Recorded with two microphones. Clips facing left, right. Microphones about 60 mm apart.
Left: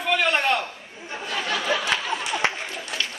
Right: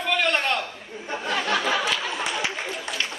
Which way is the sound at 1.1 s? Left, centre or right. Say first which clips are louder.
Right 3 dB; right.